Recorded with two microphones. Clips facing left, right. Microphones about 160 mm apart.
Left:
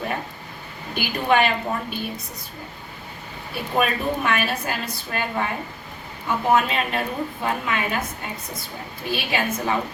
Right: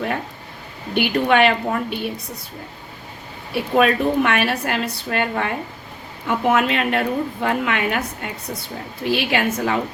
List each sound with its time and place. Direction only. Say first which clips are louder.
0.9 s a woman's voice: right 4 dB; 65° right (ahead or behind)
3.5 s a woman's voice: right 6 dB; 70° right (ahead or behind)